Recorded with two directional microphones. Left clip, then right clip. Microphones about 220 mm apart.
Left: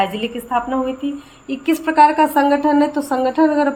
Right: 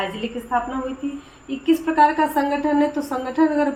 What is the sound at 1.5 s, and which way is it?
A woman's voice, 50° left (ahead or behind).